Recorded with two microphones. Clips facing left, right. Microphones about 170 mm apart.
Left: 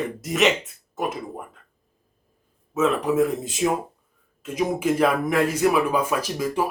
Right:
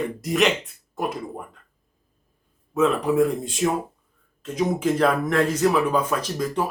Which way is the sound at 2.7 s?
Centre (ahead or behind).